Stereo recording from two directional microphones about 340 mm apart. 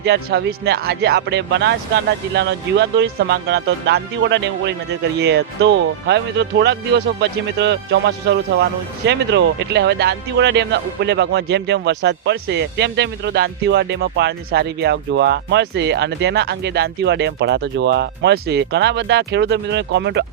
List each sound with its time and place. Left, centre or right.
0.0 s speech: right